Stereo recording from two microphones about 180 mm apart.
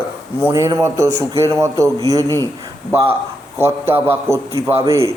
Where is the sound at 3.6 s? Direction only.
15° right (ahead or behind).